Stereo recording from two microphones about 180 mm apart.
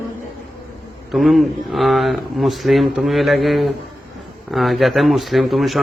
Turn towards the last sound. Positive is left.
turn(degrees=0)  # may be behind; listen again after turning